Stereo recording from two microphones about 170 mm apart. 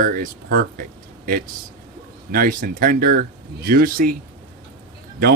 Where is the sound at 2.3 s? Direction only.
55° right (ahead or behind).